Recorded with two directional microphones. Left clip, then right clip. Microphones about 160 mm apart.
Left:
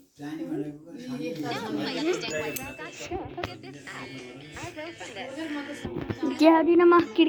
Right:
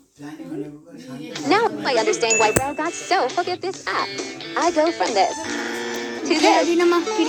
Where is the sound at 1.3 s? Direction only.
45° right (ahead or behind).